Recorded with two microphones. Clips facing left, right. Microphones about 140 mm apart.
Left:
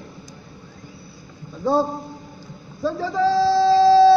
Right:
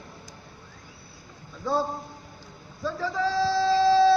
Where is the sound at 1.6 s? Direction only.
30° left (ahead or behind).